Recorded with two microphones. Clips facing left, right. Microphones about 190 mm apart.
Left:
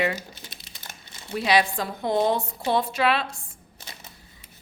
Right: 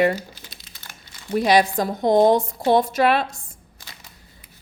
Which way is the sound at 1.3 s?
45° right (ahead or behind).